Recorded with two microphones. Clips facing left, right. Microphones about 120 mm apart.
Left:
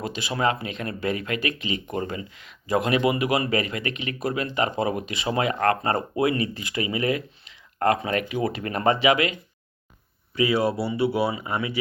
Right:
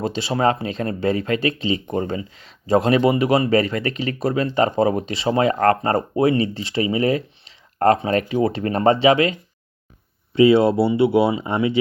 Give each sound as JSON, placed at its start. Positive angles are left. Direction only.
{"t": 0.0, "sound": "speech", "side_deg": -30}